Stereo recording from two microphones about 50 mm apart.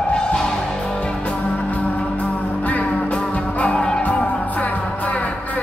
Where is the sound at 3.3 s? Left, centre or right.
Left.